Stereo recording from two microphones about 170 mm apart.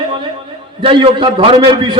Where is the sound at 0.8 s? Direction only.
30° right (ahead or behind).